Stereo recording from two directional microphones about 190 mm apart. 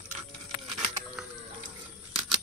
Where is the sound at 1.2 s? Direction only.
Centre (ahead or behind).